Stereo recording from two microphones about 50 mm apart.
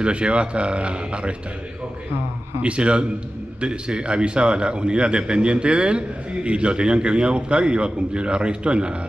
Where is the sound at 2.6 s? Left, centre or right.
Right.